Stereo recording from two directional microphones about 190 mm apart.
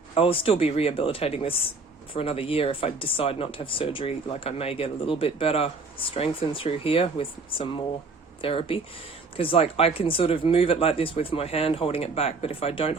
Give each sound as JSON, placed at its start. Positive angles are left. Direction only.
{"t": 0.1, "sound": "speech", "side_deg": 30}